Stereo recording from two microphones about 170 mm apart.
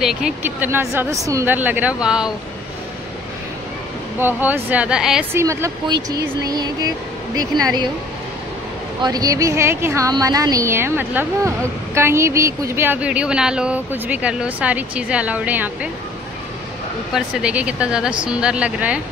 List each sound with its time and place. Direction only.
0.0 s speech: 5° right (ahead or behind)
4.2 s speech: 10° right (ahead or behind)
5.3 s speech: 15° right (ahead or behind)
9.0 s speech: 20° right (ahead or behind)
17.1 s speech: 5° right (ahead or behind)